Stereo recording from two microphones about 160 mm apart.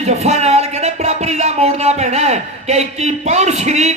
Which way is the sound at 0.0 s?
40° right (ahead or behind).